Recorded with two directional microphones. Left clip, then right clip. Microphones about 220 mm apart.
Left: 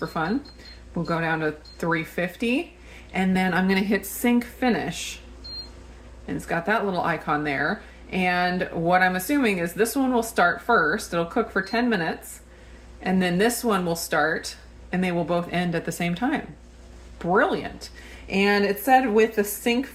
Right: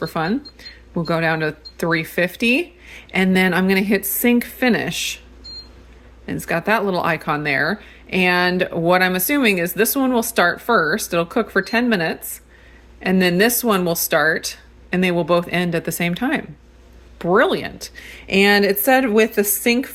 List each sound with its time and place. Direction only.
0.0 s speech: 45° right (ahead or behind)
6.2 s speech: 45° right (ahead or behind)